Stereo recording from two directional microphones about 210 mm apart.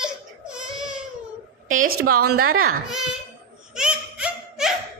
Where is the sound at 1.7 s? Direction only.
40° right (ahead or behind).